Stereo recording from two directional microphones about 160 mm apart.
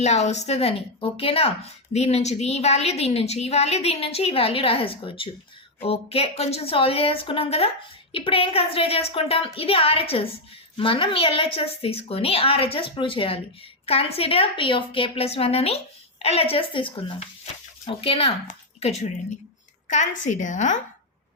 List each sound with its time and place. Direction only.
0.0 s a woman's voice: 45° left (ahead or behind)